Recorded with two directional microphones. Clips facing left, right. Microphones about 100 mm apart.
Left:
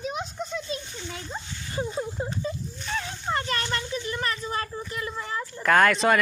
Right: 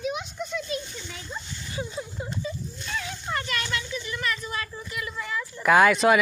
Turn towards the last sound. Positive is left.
turn(degrees=-5)  # may be behind; listen again after turning